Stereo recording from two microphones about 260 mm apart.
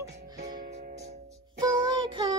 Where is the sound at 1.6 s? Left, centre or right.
Centre.